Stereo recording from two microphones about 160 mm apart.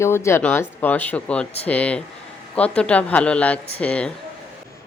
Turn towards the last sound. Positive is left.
turn(degrees=10)  # may be behind; listen again after turning